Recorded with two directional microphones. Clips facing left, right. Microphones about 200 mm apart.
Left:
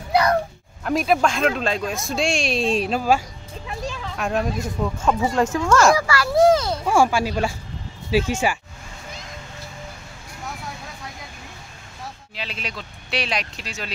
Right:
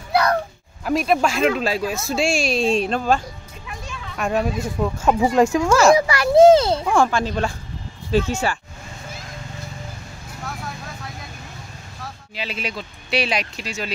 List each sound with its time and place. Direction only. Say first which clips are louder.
0.8 s speech: right 1 dB; centre (ahead or behind)
3.6 s children playing: left 6 dB; 35° left (ahead or behind)
4.2 s speech: right 2 dB; centre (ahead or behind)
5.9 s children playing: right 5 dB; 20° right (ahead or behind)
6.9 s speech: left 5 dB; 10° left (ahead or behind)
12.4 s speech: right 5 dB; 5° right (ahead or behind)